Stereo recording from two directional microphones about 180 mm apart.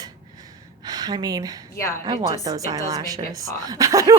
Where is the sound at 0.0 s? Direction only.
20° right (ahead or behind).